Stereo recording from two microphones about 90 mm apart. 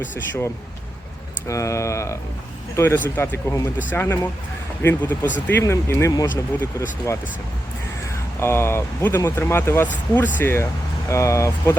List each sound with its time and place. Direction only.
1.5 s speech: 35° left (ahead or behind)